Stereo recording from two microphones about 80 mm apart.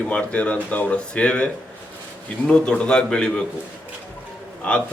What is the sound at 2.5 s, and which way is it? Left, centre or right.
Speech, centre.